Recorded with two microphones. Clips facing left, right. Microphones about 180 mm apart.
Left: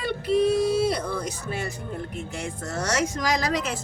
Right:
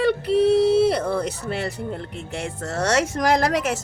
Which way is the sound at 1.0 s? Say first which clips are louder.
Right 6 dB; 65° right (ahead or behind).